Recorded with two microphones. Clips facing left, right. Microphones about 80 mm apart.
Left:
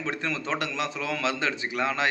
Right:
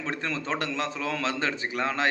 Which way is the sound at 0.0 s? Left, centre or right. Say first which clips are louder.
Left 1 dB; right.